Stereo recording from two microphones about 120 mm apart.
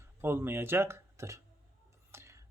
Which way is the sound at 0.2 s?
20° right (ahead or behind).